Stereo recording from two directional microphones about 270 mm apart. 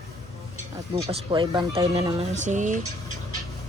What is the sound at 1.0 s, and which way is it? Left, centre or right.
Speech, centre.